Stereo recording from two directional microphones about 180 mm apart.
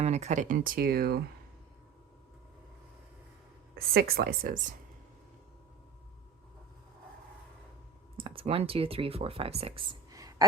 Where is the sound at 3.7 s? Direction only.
55° right (ahead or behind).